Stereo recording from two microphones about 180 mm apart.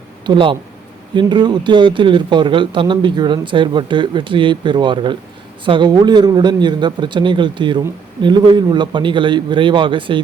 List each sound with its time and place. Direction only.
0.3 s speech: 25° right (ahead or behind)